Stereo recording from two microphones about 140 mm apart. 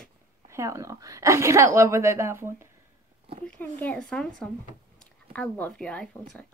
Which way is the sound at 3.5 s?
10° left (ahead or behind).